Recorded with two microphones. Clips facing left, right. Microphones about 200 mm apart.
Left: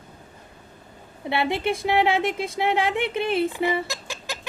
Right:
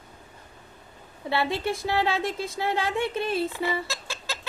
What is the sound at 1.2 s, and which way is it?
A woman's voice, 20° left (ahead or behind).